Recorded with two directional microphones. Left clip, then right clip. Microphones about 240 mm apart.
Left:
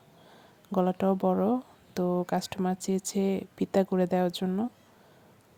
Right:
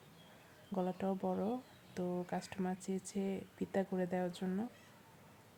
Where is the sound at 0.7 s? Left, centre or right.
Left.